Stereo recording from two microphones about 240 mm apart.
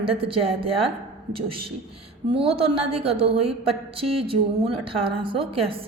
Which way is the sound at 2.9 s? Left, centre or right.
Right.